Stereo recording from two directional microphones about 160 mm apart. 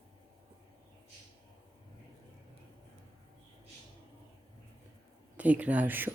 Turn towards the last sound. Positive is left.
turn(degrees=-10)  # may be behind; listen again after turning